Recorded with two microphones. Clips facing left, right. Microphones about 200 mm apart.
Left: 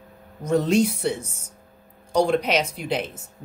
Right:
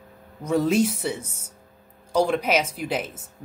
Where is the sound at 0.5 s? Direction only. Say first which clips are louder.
Left 1 dB; 5° right (ahead or behind).